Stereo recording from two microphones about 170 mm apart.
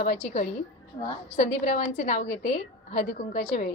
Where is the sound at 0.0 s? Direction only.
45° left (ahead or behind).